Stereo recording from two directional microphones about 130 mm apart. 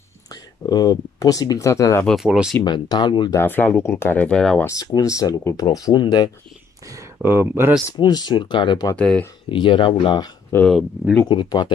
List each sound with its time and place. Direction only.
0.3 s speech: 30° left (ahead or behind)
2.0 s speech: 5° right (ahead or behind)
2.6 s speech: 35° left (ahead or behind)
3.3 s speech: 15° left (ahead or behind)
4.6 s speech: 25° left (ahead or behind)
7.2 s speech: 15° right (ahead or behind)
7.9 s speech: 30° left (ahead or behind)
8.9 s speech: 10° left (ahead or behind)
9.5 s speech: 40° left (ahead or behind)
10.7 s speech: centre (ahead or behind)
11.2 s speech: 35° left (ahead or behind)